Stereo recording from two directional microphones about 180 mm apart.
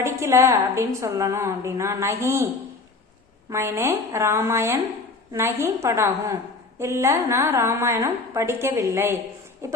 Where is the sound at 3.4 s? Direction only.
15° right (ahead or behind).